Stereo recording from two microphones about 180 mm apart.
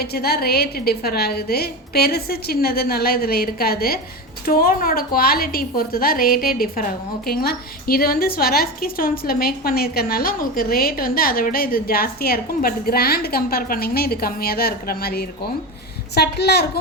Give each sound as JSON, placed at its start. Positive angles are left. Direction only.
{"t": 0.0, "sound": "a woman's voice", "side_deg": 60}